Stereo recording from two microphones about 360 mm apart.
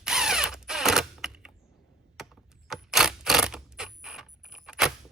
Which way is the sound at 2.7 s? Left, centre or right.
Centre.